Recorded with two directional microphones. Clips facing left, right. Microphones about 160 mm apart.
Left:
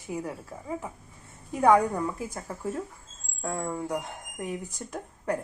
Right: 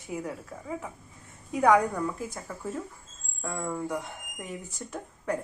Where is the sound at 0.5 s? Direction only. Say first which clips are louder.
Even; 25° left (ahead or behind).